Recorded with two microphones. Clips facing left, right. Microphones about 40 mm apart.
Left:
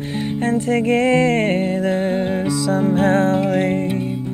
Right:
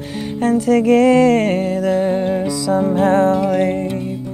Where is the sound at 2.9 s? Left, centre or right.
Left.